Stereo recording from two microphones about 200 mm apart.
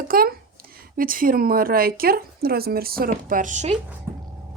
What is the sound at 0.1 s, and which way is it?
A child's voice, 45° right (ahead or behind).